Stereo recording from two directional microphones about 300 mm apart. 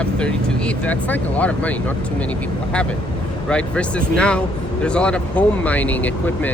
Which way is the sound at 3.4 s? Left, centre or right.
Centre.